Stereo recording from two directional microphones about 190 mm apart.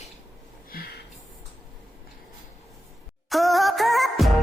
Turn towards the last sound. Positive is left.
turn(degrees=0)  # may be behind; listen again after turning